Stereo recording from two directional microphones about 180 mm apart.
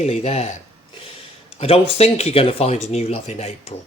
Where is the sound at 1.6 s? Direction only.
35° left (ahead or behind).